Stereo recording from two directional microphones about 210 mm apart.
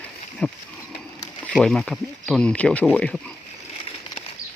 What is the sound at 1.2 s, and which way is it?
Speech, 5° left (ahead or behind).